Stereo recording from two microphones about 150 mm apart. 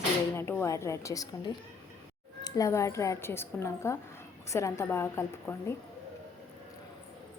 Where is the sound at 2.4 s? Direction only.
20° left (ahead or behind).